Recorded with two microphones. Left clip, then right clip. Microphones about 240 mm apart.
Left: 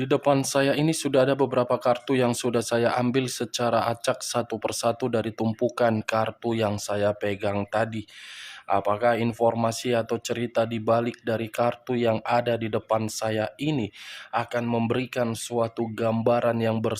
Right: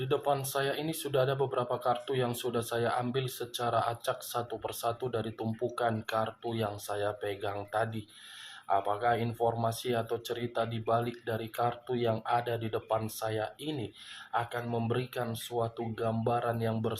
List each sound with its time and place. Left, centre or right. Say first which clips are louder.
0.0 s speech: left 8 dB; left